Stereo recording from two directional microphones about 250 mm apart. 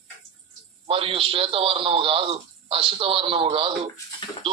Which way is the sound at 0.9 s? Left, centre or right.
Right.